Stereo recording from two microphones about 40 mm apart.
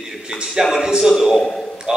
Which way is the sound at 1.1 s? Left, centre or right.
Centre.